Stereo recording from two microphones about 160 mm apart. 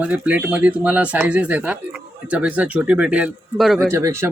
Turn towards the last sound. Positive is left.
turn(degrees=-15)  # may be behind; listen again after turning